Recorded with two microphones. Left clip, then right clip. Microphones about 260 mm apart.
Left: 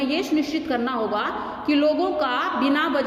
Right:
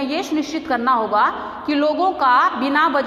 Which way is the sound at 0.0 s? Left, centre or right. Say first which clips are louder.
Right 1 dB; centre.